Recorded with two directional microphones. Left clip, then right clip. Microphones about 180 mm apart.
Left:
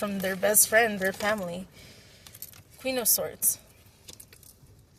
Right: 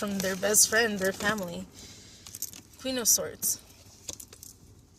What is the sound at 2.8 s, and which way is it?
Speech, 15° left (ahead or behind).